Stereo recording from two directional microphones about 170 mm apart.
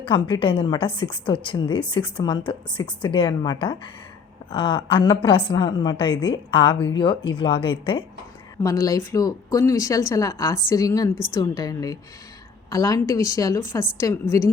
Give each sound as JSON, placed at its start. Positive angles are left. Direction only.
{"t": 0.0, "sound": "a woman's voice", "side_deg": 30}